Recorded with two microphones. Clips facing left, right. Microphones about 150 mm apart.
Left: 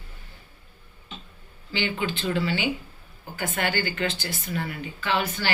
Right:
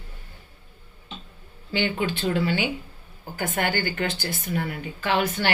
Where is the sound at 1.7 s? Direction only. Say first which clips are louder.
Right 3 dB; 55° right (ahead or behind).